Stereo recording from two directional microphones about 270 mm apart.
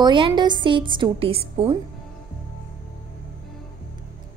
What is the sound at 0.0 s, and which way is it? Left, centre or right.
A woman's voice, centre.